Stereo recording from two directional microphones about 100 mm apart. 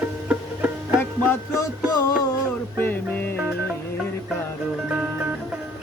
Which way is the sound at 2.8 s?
20° left (ahead or behind).